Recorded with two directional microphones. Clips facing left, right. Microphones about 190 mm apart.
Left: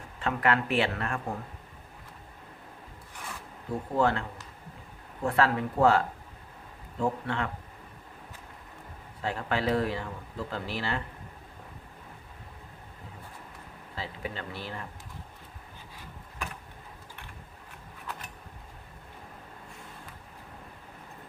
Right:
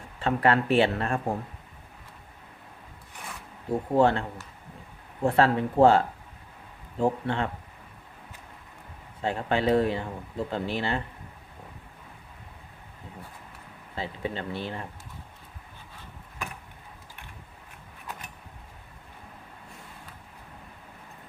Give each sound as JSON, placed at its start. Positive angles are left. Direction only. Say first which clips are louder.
{"t": 0.2, "sound": "speech", "louder": "right 4 dB", "side_deg": -30}
{"t": 3.7, "sound": "speech", "louder": "right 5 dB", "side_deg": -30}
{"t": 5.2, "sound": "speech", "louder": "right 4 dB", "side_deg": -30}
{"t": 7.0, "sound": "speech", "louder": "right 4 dB", "side_deg": -25}
{"t": 9.2, "sound": "speech", "louder": "right 4 dB", "side_deg": -25}
{"t": 13.9, "sound": "speech", "louder": "right 5 dB", "side_deg": -25}